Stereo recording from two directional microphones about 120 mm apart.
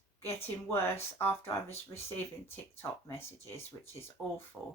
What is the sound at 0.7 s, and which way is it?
Speech, 20° left (ahead or behind).